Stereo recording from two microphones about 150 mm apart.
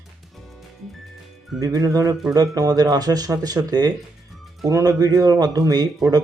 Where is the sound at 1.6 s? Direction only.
25° right (ahead or behind).